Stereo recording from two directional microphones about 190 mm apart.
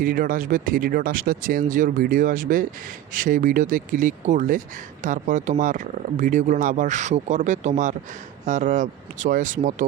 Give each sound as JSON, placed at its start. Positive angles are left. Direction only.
{"t": 0.0, "sound": "speech", "side_deg": -50}